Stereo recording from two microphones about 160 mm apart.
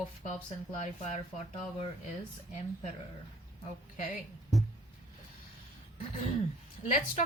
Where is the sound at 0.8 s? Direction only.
45° left (ahead or behind).